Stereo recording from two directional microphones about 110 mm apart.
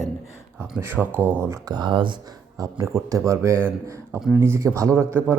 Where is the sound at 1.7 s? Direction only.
40° right (ahead or behind).